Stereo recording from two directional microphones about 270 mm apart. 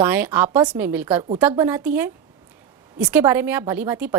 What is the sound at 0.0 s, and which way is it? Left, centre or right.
A woman's voice, centre.